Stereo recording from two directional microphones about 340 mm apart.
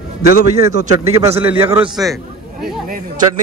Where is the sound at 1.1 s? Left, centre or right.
Centre.